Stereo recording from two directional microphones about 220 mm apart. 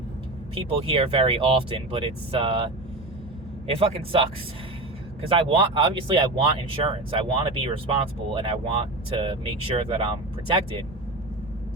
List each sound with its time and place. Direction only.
0.5 s speech: 25° right (ahead or behind)
3.7 s speech: 25° right (ahead or behind)
5.3 s speech: 25° right (ahead or behind)